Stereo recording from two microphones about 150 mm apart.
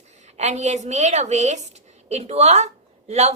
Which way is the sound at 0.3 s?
50° right (ahead or behind).